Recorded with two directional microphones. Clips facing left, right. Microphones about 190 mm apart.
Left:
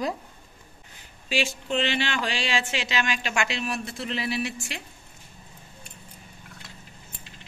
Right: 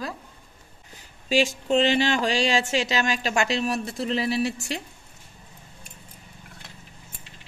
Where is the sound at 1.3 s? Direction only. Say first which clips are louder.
Right 6 dB; 40° right (ahead or behind).